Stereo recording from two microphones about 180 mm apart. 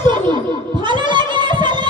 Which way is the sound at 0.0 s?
25° right (ahead or behind).